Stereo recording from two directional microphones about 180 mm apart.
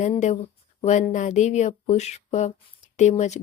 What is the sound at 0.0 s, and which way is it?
Speech, 40° left (ahead or behind).